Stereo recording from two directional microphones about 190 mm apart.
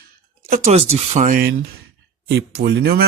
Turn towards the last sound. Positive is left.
turn(degrees=-60)  # may be behind; listen again after turning